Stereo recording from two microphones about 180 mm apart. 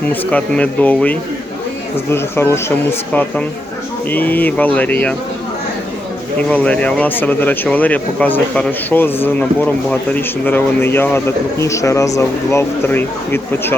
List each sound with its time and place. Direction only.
0.1 s speech: 5° left (ahead or behind)
6.5 s speech: 10° left (ahead or behind)